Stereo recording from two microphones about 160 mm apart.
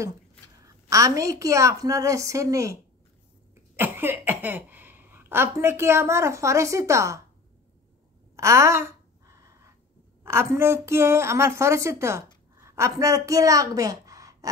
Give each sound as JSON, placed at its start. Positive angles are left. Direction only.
{"t": 0.7, "sound": "a woman's voice", "side_deg": -20}
{"t": 8.4, "sound": "sigh", "side_deg": -15}
{"t": 10.2, "sound": "a woman's voice", "side_deg": -15}
{"t": 12.5, "sound": "a sound", "side_deg": -15}
{"t": 13.0, "sound": "a woman's voice", "side_deg": -20}